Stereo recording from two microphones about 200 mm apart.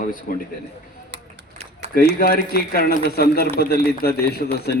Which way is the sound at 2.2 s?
50° left (ahead or behind).